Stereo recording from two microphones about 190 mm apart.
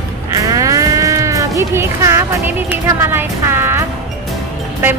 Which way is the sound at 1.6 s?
15° right (ahead or behind).